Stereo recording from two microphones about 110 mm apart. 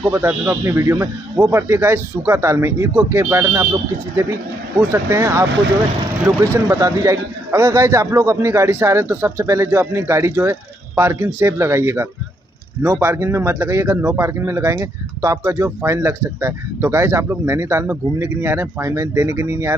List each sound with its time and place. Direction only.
0.1 s speech: 20° right (ahead or behind)